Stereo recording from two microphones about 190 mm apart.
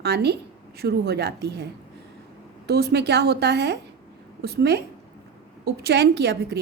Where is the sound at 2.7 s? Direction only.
60° right (ahead or behind).